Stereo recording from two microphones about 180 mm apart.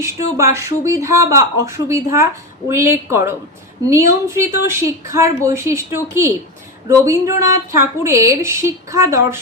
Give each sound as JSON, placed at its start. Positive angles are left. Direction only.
{"t": 0.0, "sound": "speech", "side_deg": -15}